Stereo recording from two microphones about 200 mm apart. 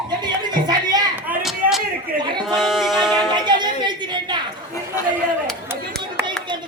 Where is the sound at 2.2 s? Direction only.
20° right (ahead or behind).